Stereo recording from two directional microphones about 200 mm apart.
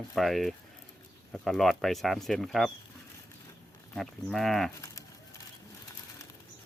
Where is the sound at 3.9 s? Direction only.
Centre (ahead or behind).